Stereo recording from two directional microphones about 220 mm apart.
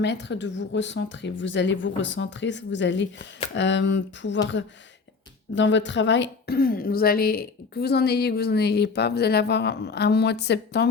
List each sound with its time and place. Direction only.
0.0 s a woman's voice: 50° left (ahead or behind)